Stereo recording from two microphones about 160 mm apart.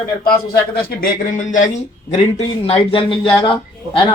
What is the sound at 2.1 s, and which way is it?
Speech, 40° left (ahead or behind).